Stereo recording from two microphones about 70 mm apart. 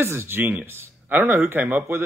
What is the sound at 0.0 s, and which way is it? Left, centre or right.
Speech, right.